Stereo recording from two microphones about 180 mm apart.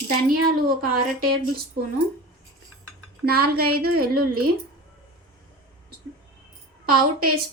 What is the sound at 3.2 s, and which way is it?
A woman's voice, 60° right (ahead or behind).